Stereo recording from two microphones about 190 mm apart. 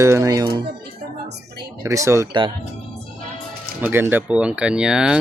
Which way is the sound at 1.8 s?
15° right (ahead or behind).